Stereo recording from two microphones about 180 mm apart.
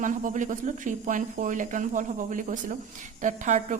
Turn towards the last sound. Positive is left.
turn(degrees=-40)  # may be behind; listen again after turning